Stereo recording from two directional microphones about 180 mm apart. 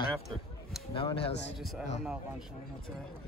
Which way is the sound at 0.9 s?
30° left (ahead or behind).